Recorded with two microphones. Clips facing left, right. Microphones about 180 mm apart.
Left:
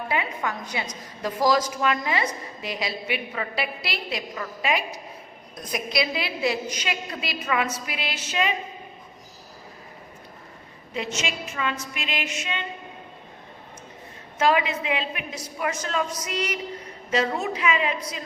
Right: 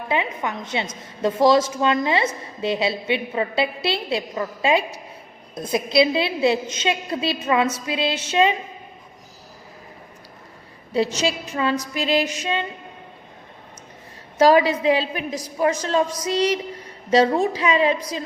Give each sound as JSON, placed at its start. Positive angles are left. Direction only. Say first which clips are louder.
{"t": 0.1, "sound": "a woman's voice", "louder": "right 5 dB", "side_deg": -20}
{"t": 10.9, "sound": "a woman's voice", "louder": "right 8 dB", "side_deg": -35}
{"t": 14.3, "sound": "a woman's voice", "louder": "right 7 dB", "side_deg": -35}